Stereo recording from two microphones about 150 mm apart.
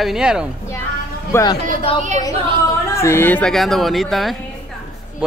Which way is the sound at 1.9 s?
40° left (ahead or behind).